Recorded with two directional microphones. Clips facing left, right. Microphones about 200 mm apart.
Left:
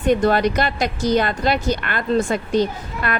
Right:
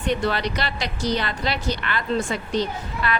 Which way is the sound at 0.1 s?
50° left (ahead or behind).